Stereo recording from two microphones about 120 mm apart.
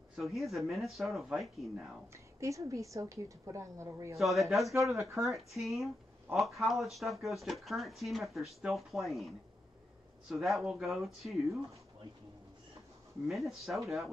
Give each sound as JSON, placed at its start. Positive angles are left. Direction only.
{"t": 0.1, "sound": "speech", "side_deg": 0}
{"t": 2.1, "sound": "a woman's voice", "side_deg": -25}
{"t": 4.2, "sound": "speech", "side_deg": 0}
{"t": 10.3, "sound": "speech", "side_deg": 0}
{"t": 13.3, "sound": "speech", "side_deg": 0}